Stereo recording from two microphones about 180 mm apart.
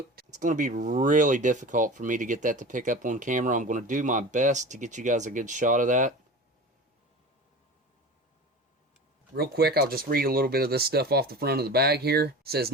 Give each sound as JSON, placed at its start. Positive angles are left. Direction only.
{"t": 0.3, "sound": "speech", "side_deg": -45}
{"t": 9.3, "sound": "speech", "side_deg": -60}